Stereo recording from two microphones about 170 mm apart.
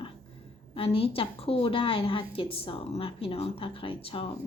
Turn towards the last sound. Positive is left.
turn(degrees=35)  # may be behind; listen again after turning